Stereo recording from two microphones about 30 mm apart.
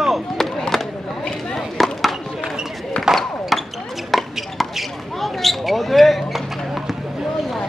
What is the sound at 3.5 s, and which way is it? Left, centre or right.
Basketball bounce, centre.